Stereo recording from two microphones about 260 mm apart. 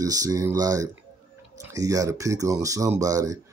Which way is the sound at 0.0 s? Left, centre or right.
Centre.